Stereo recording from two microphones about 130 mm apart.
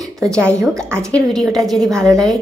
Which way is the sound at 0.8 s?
20° right (ahead or behind).